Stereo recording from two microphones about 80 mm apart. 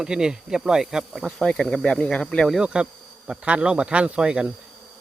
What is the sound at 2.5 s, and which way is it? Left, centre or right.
Speech, centre.